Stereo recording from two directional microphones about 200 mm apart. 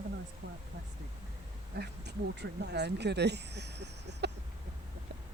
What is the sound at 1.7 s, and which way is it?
Speech, 55° right (ahead or behind).